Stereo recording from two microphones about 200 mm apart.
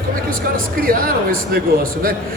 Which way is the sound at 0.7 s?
45° right (ahead or behind).